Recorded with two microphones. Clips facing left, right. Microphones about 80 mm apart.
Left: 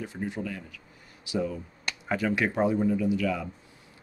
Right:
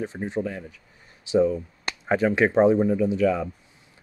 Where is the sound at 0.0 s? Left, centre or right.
Right.